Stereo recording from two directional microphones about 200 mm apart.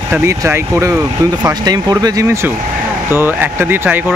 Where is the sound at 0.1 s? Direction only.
15° right (ahead or behind).